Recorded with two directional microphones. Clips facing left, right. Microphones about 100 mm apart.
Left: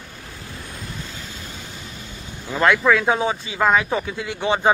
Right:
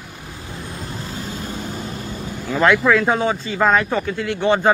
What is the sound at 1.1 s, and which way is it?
Vehicle, 40° right (ahead or behind).